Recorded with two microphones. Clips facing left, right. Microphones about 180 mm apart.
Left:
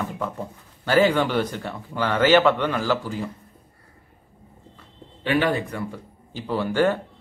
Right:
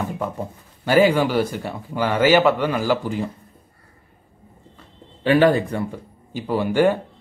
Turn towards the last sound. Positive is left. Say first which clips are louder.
# right 3 dB
turn(degrees=-15)  # may be behind; listen again after turning